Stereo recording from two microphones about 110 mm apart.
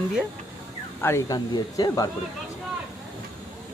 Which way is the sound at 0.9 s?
25° left (ahead or behind).